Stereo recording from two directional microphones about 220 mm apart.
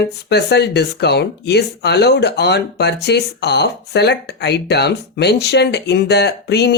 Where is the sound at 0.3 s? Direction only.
50° left (ahead or behind).